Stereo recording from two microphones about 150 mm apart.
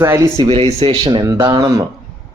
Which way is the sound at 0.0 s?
15° right (ahead or behind).